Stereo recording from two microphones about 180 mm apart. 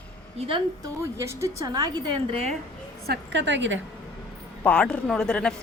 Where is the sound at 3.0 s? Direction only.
70° right (ahead or behind); by 3.8 s 90° right.